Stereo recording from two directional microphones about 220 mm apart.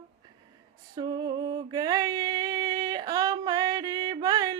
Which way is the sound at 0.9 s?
20° right (ahead or behind).